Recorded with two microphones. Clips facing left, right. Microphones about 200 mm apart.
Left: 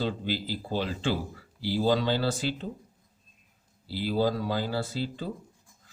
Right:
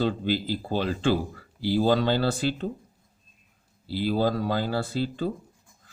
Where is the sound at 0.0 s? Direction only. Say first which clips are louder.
Right 5 dB; 55° right (ahead or behind).